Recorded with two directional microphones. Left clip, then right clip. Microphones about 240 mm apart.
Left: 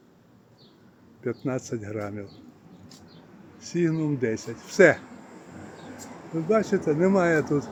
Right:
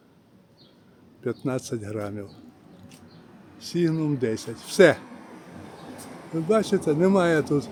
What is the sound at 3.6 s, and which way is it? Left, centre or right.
Speech, centre.